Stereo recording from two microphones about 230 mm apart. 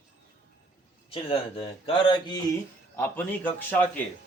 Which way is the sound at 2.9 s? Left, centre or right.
Centre.